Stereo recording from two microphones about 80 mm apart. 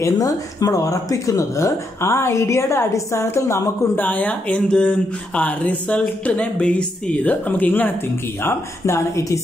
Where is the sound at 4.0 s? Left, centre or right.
Left.